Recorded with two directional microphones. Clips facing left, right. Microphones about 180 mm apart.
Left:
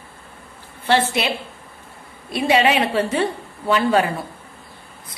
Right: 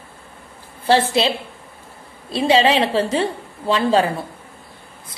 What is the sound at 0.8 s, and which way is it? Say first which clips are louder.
Speech: right 3 dB; 30° right (ahead or behind).